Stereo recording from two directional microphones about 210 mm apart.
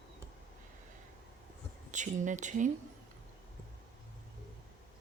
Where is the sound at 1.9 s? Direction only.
35° right (ahead or behind).